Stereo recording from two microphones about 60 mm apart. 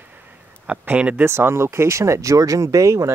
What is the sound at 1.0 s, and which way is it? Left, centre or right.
Speech, right.